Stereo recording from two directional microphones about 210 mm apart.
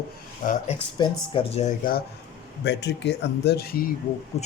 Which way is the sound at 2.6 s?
55° left (ahead or behind).